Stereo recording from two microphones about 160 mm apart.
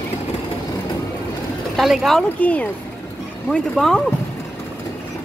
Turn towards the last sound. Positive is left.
turn(degrees=5)  # may be behind; listen again after turning